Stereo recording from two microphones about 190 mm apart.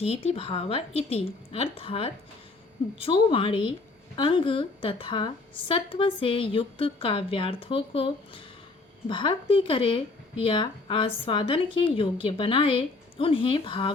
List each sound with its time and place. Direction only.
0.0 s a woman's voice: 30° left (ahead or behind)